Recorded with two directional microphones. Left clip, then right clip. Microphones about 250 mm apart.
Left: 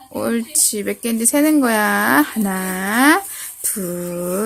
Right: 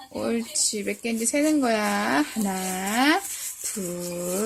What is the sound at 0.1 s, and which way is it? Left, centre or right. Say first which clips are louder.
Speech: left 6 dB; centre.